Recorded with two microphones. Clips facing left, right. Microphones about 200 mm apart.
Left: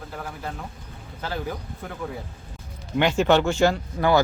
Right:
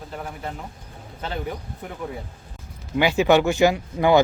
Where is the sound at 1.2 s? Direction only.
20° right (ahead or behind).